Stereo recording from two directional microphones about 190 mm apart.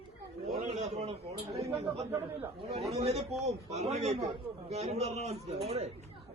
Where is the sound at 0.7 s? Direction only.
35° right (ahead or behind).